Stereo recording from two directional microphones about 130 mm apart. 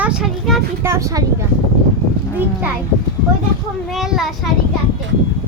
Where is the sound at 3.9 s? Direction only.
Centre (ahead or behind).